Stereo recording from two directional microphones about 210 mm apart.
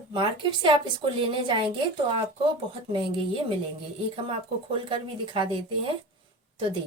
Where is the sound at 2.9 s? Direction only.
25° right (ahead or behind).